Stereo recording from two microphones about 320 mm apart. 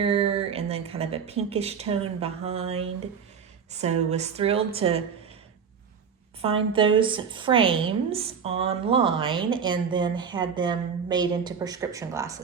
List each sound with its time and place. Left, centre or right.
0.0 s speech: centre
6.4 s a woman's voice: centre